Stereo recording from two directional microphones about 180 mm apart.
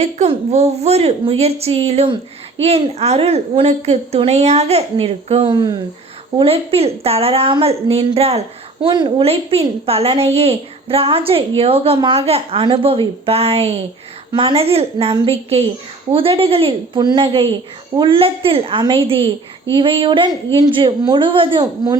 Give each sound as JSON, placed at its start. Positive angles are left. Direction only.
{"t": 0.0, "sound": "a woman's voice", "side_deg": -35}